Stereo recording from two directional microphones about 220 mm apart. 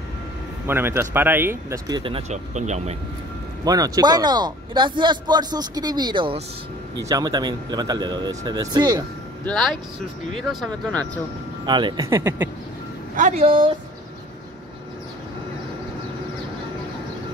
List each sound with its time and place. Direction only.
0.7 s speech: 10° right (ahead or behind); by 3.0 s 30° right (ahead or behind)
3.6 s a man's voice: 15° right (ahead or behind)
9.5 s speech: 5° left (ahead or behind)
11.6 s speech: 20° right (ahead or behind)
13.1 s a man's voice: 30° right (ahead or behind)